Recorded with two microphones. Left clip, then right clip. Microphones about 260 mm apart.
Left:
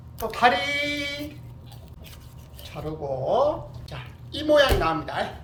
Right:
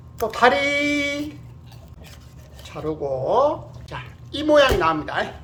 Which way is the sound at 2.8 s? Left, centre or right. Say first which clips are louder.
Right 5 dB; centre.